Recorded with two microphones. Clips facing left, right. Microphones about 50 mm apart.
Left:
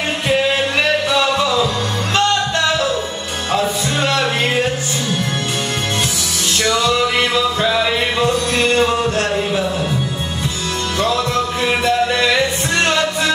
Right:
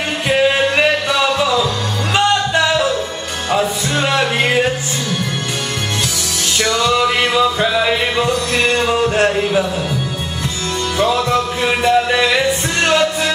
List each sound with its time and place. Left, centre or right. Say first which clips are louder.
2.1 s music: right 2 dB; centre
6.6 s music: right 1 dB; centre
11.0 s music: right 2 dB; centre